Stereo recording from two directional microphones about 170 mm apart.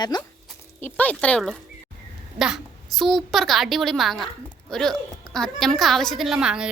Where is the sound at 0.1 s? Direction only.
25° left (ahead or behind).